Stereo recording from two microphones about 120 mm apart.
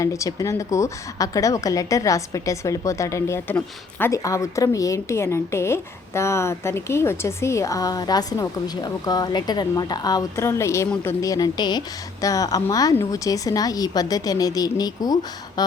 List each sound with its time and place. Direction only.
0.0 s a woman's voice: 25° left (ahead or behind)
10.3 s a woman's voice: 20° left (ahead or behind)